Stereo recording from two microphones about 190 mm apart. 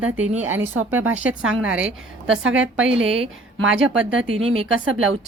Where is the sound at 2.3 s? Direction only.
90° right.